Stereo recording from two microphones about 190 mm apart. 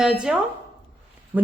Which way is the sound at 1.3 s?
10° right (ahead or behind).